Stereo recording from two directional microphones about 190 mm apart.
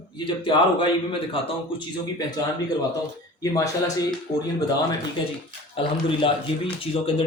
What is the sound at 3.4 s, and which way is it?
Speech, 15° left (ahead or behind).